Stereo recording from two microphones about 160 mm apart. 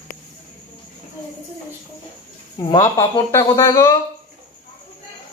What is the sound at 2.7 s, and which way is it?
Speech, 20° left (ahead or behind).